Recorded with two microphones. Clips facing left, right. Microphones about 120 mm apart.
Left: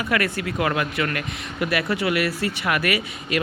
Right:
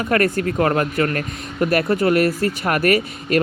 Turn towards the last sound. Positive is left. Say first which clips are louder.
# right 7 dB
turn(degrees=-45)  # may be behind; listen again after turning